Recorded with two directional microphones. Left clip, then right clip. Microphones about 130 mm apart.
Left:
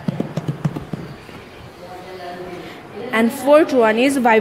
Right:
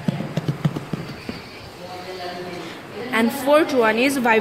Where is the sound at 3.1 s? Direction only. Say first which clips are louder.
Left 4 dB; 55° left (ahead or behind).